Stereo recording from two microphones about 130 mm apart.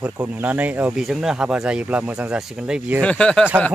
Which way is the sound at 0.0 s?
10° right (ahead or behind).